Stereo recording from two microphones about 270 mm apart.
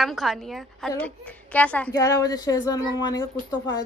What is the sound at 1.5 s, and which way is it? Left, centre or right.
A woman's voice, centre.